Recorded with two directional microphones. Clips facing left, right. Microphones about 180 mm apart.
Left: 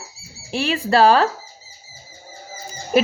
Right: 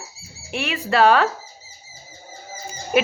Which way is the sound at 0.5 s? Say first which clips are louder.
Left 3 dB; 35° left (ahead or behind).